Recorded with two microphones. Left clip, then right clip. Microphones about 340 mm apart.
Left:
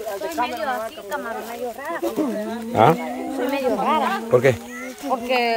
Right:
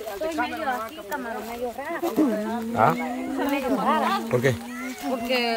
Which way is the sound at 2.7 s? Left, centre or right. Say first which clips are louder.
Left 5 dB; left.